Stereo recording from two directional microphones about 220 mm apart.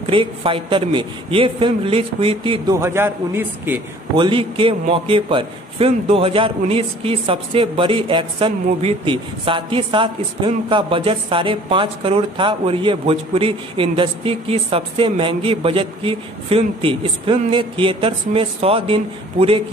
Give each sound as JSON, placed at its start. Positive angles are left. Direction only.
{"t": 0.0, "sound": "a man's voice", "side_deg": -25}
{"t": 4.2, "sound": "a man's voice", "side_deg": -25}